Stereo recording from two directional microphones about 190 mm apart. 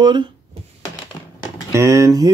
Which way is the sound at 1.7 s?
15° right (ahead or behind).